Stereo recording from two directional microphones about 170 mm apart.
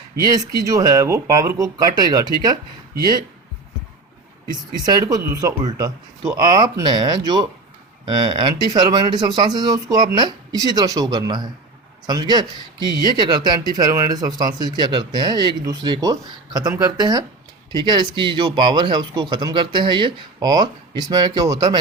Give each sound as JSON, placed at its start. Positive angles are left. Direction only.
{"t": 0.3, "sound": "speech", "side_deg": -20}
{"t": 4.8, "sound": "speech", "side_deg": -20}